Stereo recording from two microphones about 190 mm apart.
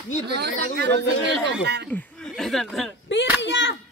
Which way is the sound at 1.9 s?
5° left (ahead or behind).